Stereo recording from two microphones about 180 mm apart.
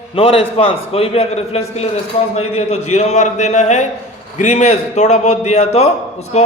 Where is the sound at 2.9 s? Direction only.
40° left (ahead or behind).